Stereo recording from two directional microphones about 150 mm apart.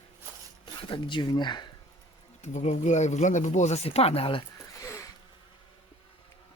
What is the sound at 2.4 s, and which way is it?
Speech, 50° left (ahead or behind).